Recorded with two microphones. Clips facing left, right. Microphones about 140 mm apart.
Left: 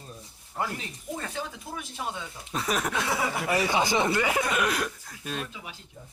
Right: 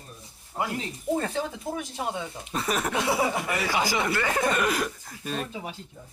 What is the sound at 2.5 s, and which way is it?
Speech, centre (ahead or behind).